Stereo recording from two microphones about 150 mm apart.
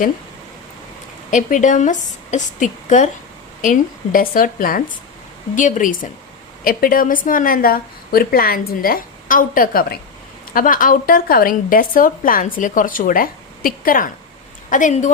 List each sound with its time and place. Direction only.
1.3 s a woman's voice: 55° left (ahead or behind)
5.5 s a woman's voice: 55° left (ahead or behind)